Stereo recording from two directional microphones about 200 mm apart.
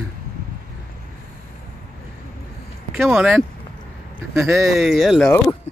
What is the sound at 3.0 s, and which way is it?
Speech, 5° right (ahead or behind).